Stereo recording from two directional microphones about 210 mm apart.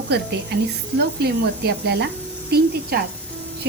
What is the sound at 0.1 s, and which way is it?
A woman's voice, 50° right (ahead or behind).